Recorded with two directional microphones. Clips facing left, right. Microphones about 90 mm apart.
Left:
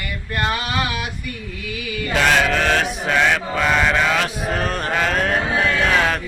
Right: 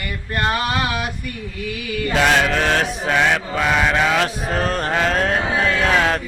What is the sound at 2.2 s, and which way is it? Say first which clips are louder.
Chant: even; 15° right (ahead or behind).